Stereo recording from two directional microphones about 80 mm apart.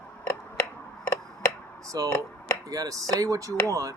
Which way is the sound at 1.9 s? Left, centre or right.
Right.